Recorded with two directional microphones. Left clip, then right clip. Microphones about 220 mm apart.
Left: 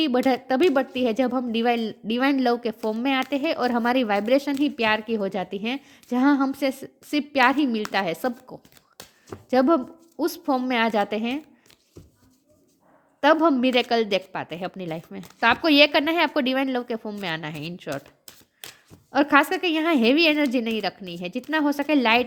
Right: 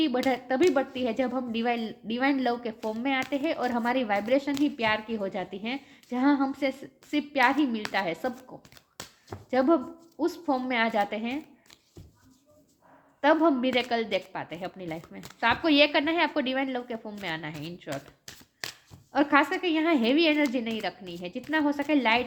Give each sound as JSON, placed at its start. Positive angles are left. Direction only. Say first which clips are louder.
{"t": 0.0, "sound": "speech", "louder": "left 5 dB", "side_deg": 45}
{"t": 13.2, "sound": "speech", "louder": "left 4 dB", "side_deg": 45}
{"t": 19.1, "sound": "speech", "louder": "left 4 dB", "side_deg": 45}